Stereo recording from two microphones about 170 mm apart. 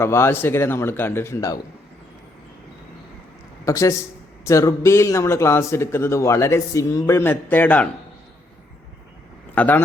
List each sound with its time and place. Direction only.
0.0 s a man's voice: 15° left (ahead or behind)
3.7 s a man's voice: 20° left (ahead or behind)
9.6 s a man's voice: 10° left (ahead or behind)